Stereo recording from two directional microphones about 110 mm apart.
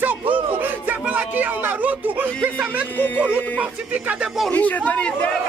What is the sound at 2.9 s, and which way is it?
Speech, 15° left (ahead or behind).